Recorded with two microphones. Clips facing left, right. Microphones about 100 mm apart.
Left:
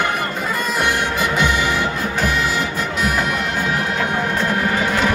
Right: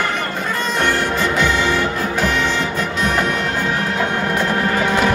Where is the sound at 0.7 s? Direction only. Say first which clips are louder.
Right 2 dB; 15° left (ahead or behind).